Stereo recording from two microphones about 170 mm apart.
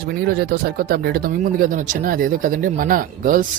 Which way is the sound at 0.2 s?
60° right (ahead or behind).